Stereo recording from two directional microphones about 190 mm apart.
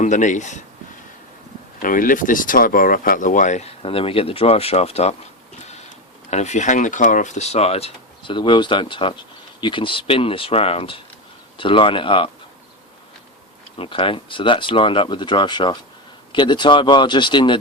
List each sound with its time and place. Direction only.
0.0 s speech: 40° left (ahead or behind)
1.8 s speech: 45° left (ahead or behind)
6.3 s speech: 35° left (ahead or behind)
13.7 s speech: 25° left (ahead or behind)